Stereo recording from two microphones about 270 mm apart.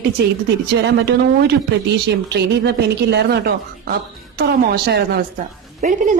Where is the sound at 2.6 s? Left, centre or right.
Right.